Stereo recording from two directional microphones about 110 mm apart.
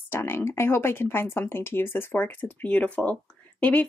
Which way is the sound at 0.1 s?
20° left (ahead or behind).